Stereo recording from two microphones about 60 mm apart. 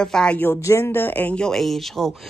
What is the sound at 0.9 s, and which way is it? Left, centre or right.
Speech, left.